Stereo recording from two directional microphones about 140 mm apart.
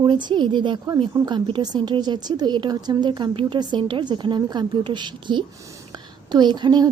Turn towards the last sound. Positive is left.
turn(degrees=-30)  # may be behind; listen again after turning